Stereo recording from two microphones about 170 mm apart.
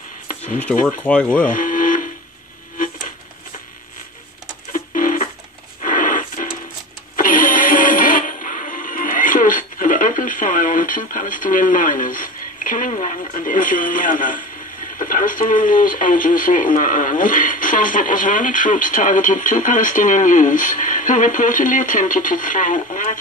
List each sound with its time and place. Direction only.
0.3 s a sound: 45° left (ahead or behind)
0.9 s speech: 10° left (ahead or behind)
1.5 s printer: 50° left (ahead or behind)
4.7 s a sound: 50° left (ahead or behind)
5.8 s radio: 50° left (ahead or behind)
7.2 s music: 55° left (ahead or behind)